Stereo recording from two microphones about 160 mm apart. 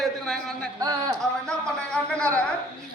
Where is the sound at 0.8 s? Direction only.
25° right (ahead or behind).